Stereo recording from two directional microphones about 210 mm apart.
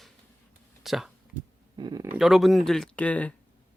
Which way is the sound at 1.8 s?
20° right (ahead or behind).